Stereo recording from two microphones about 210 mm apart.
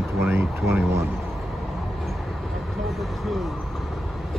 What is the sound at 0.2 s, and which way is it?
Speech, 10° right (ahead or behind).